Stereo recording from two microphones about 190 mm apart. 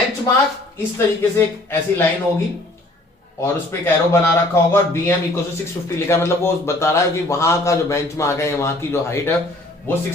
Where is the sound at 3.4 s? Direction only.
15° left (ahead or behind).